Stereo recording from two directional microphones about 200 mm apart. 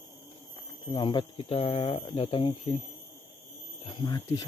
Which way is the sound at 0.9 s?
25° left (ahead or behind).